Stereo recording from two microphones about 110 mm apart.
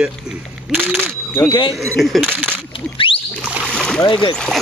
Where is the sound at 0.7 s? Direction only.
10° right (ahead or behind).